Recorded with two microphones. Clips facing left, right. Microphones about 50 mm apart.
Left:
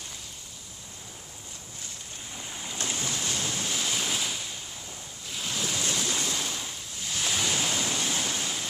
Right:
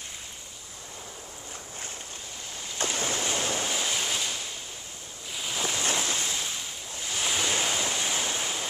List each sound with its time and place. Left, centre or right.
2.8 s boat: right
3.7 s waves: centre
5.6 s waves: centre
5.9 s waves: right
6.1 s waves: centre